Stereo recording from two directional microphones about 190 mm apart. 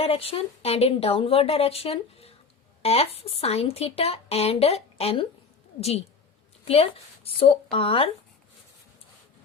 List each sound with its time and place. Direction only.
0.0 s a woman's voice: 30° left (ahead or behind)